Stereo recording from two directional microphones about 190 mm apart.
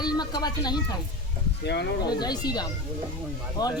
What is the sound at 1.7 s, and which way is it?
Speech, 60° left (ahead or behind).